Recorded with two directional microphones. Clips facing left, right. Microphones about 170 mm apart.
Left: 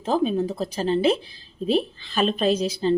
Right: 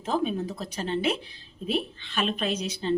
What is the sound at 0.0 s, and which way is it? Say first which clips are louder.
A woman's voice: left 5 dB; 30° left (ahead or behind).